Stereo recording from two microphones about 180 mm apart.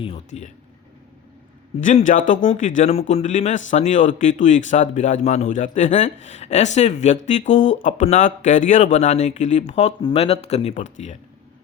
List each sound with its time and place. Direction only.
0.3 s speech: 35° left (ahead or behind)
1.8 s a man's voice: 45° left (ahead or behind)